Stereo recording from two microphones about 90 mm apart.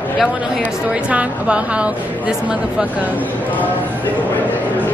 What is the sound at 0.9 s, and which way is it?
A woman's voice, 15° right (ahead or behind).